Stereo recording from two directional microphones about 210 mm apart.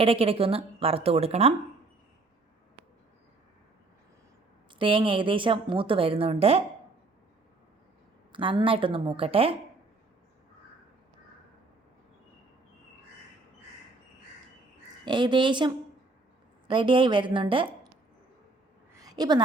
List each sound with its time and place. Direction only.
0.0 s a woman's voice: 25° right (ahead or behind)
4.8 s a woman's voice: 25° right (ahead or behind)
8.3 s a woman's voice: 25° right (ahead or behind)
15.0 s a woman's voice: 20° right (ahead or behind)
19.0 s a sound: 20° right (ahead or behind)